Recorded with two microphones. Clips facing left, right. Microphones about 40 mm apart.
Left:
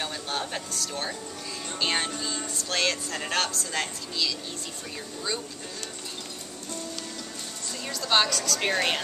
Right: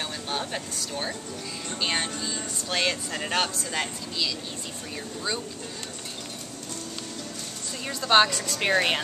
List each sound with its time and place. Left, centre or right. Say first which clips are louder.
0.0 s vehicle: even; centre
1.8 s speech: left 1 dB; centre
7.9 s a woman's voice: right 4 dB; right
8.5 s speech: right 4 dB; centre